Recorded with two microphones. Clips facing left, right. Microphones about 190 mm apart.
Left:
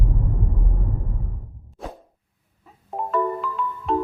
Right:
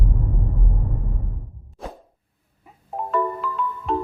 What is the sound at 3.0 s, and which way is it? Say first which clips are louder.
Marimba: left 1 dB; centre (ahead or behind).